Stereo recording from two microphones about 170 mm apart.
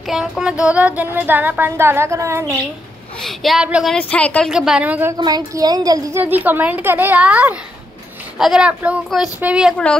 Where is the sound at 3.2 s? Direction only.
Centre (ahead or behind).